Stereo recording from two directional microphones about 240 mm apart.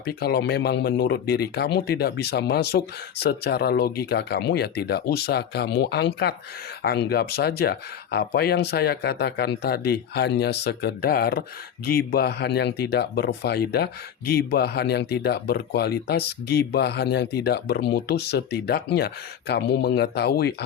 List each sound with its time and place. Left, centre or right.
0.0 s speech: left